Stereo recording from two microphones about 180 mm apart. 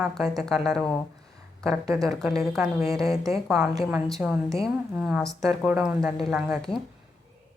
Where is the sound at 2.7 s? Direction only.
15° right (ahead or behind).